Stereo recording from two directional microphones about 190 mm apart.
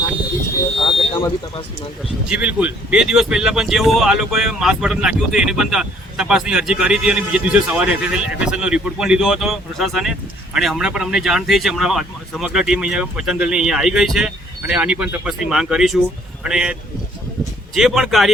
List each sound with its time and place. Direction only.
0.8 s a sound: 25° left (ahead or behind)
2.2 s speech: 5° right (ahead or behind)
17.7 s speech: centre (ahead or behind)